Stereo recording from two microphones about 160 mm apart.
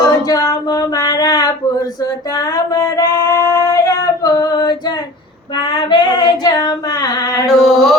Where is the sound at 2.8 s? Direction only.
20° left (ahead or behind).